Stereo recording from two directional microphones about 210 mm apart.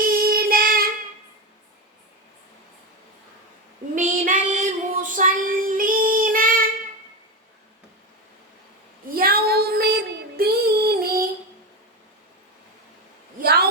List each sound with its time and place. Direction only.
0.0 s child singing: 45° right (ahead or behind)
3.9 s child singing: 35° right (ahead or behind)
9.0 s child singing: 45° right (ahead or behind)
13.4 s a sound: 50° right (ahead or behind)